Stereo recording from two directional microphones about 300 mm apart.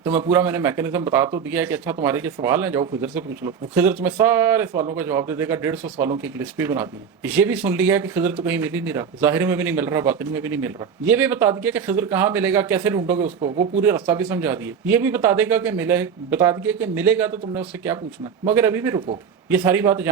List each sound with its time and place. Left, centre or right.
0.0 s speech: centre
13.2 s speech: right
13.8 s speech: centre